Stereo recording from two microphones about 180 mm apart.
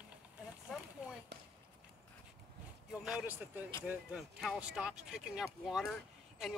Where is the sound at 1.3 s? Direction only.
70° right (ahead or behind).